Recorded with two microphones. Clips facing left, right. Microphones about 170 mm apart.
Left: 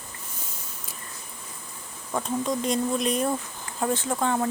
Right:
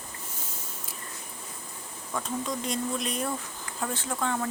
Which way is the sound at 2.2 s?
20° left (ahead or behind).